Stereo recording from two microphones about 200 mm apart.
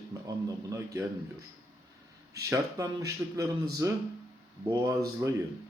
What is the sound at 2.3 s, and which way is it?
Speech, 15° right (ahead or behind).